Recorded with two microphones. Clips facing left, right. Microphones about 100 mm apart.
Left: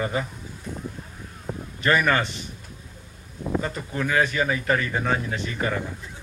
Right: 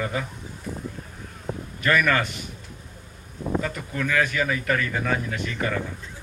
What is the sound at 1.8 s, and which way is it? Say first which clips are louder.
Speech: left 1 dB; 30° left (ahead or behind).